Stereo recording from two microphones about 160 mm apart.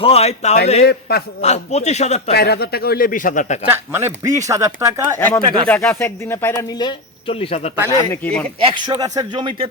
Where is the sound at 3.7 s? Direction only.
15° right (ahead or behind).